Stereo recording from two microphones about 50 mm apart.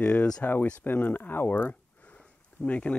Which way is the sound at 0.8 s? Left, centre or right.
Left.